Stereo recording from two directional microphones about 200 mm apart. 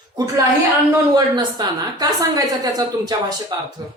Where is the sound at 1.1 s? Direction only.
20° right (ahead or behind).